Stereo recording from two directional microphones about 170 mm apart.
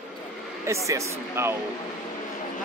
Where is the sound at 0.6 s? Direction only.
20° right (ahead or behind).